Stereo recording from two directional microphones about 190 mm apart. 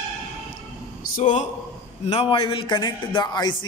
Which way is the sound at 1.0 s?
40° left (ahead or behind).